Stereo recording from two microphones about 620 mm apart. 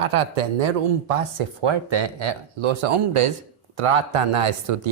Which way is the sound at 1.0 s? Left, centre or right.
Right.